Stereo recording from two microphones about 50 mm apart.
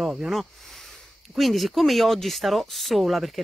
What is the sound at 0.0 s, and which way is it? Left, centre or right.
Speech, centre.